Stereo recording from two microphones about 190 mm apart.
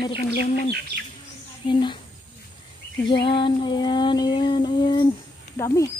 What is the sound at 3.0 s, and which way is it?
Female singing, 25° left (ahead or behind).